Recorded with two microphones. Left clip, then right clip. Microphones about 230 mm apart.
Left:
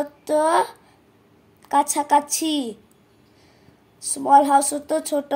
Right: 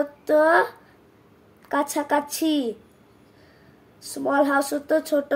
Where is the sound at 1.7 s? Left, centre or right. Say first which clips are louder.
Left 5 dB; left.